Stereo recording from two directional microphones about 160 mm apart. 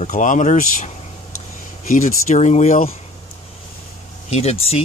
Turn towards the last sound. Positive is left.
turn(degrees=40)  # may be behind; listen again after turning